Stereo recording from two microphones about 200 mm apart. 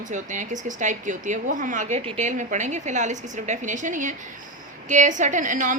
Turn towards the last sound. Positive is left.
turn(degrees=-40)  # may be behind; listen again after turning